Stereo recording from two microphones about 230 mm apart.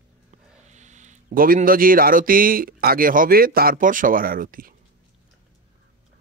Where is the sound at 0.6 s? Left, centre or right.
Right.